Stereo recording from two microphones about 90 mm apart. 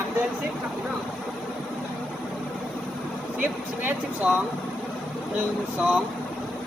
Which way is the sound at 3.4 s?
20° right (ahead or behind).